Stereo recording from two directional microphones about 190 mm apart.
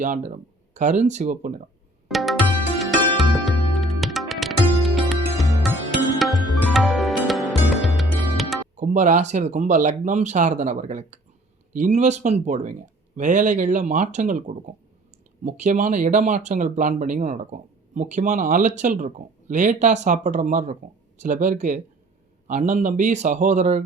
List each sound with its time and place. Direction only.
0.0 s speech: 40° right (ahead or behind)
2.0 s music: centre (ahead or behind)
8.7 s speech: 40° right (ahead or behind)